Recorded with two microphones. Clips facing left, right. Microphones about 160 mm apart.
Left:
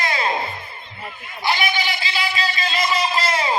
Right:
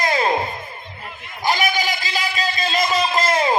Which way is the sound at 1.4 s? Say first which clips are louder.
Right 2 dB; 40° right (ahead or behind).